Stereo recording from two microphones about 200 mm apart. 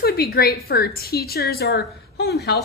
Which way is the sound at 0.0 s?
50° left (ahead or behind).